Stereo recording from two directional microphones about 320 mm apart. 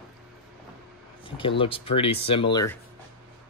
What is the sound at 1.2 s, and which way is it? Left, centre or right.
Speech, centre.